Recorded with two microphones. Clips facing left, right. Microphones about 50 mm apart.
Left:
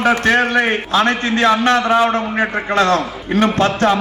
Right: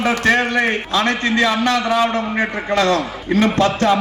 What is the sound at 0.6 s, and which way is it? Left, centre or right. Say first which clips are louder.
A man's voice: left 2 dB; left.